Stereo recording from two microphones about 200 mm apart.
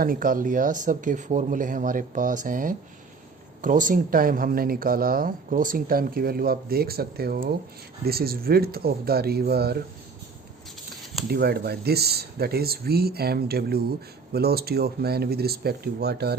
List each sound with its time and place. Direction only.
0.0 s speech: 45° right (ahead or behind)
11.3 s speech: 50° right (ahead or behind)